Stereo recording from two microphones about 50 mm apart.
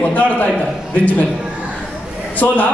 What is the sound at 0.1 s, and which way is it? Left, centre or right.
Speech, left.